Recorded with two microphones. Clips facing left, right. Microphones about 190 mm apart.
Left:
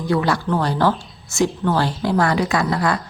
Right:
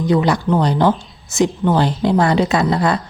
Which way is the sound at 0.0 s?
20° right (ahead or behind).